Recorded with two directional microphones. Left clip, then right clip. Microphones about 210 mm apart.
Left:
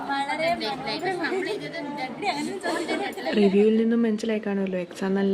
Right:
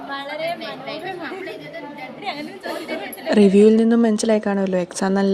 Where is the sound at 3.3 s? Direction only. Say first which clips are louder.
Right 7 dB; 30° right (ahead or behind).